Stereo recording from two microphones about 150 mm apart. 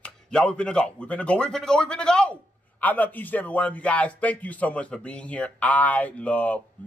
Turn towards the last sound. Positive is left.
turn(degrees=10)  # may be behind; listen again after turning